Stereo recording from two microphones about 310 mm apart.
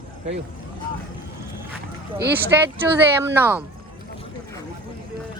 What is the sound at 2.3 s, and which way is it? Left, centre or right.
Speech, centre.